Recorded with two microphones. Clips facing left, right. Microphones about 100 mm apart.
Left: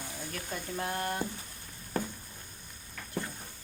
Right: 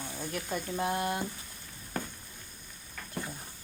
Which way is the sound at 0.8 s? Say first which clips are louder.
Right 3 dB; 15° right (ahead or behind).